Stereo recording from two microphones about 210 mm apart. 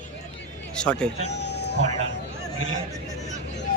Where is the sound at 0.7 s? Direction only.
5° left (ahead or behind).